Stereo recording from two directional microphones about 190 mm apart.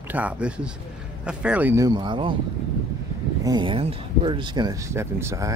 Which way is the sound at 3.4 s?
25° right (ahead or behind).